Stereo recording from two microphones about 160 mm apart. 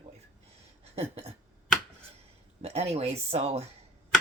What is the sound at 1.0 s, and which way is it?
Speech, 40° right (ahead or behind).